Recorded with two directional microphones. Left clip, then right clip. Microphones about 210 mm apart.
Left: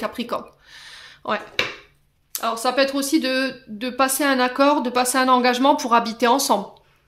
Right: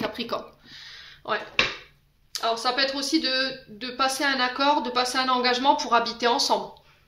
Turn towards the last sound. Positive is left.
turn(degrees=55)  # may be behind; listen again after turning